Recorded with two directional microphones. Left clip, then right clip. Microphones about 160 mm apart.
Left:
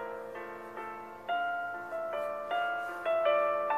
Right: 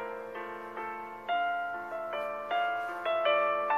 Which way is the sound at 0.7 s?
30° right (ahead or behind).